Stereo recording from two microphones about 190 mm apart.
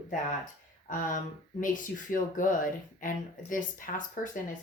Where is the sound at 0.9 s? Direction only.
45° left (ahead or behind).